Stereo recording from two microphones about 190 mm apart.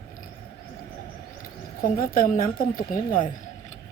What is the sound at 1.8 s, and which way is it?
A woman's voice, 45° left (ahead or behind).